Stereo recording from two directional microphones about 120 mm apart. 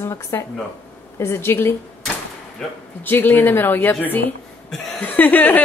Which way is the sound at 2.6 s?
5° left (ahead or behind).